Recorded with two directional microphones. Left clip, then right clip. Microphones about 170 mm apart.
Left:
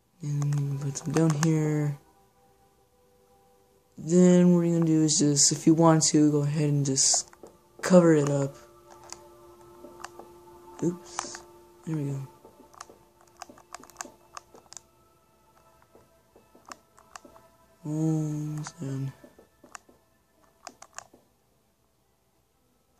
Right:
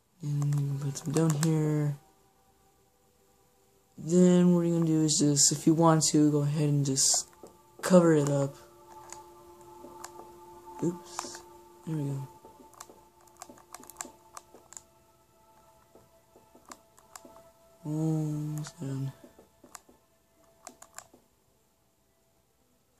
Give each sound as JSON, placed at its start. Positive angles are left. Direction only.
{"t": 0.2, "sound": "a sound", "side_deg": 15}
{"t": 0.7, "sound": "typing", "side_deg": 15}
{"t": 1.1, "sound": "speech", "side_deg": 20}
{"t": 4.0, "sound": "speech", "side_deg": 15}
{"t": 10.8, "sound": "speech", "side_deg": 15}
{"t": 11.2, "sound": "music", "side_deg": 15}
{"t": 13.4, "sound": "typing", "side_deg": 30}
{"t": 17.8, "sound": "speech", "side_deg": 15}